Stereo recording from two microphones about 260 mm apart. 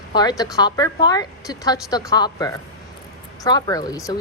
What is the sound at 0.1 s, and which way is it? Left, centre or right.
Speech, centre.